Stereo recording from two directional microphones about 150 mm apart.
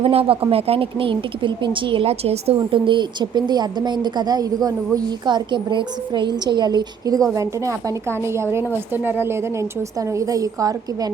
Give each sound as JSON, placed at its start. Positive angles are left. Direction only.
{"t": 0.0, "sound": "speech", "side_deg": -40}